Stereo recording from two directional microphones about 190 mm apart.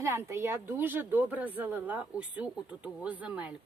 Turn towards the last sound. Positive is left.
turn(degrees=-5)  # may be behind; listen again after turning